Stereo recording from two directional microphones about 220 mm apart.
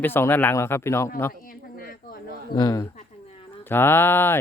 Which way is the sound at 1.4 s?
40° left (ahead or behind).